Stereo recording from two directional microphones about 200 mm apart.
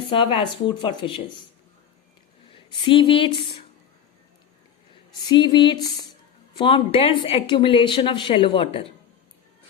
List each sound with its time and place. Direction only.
0.3 s a woman's voice: 25° left (ahead or behind)
2.5 s speech: 25° left (ahead or behind)
5.3 s a woman's voice: 25° left (ahead or behind)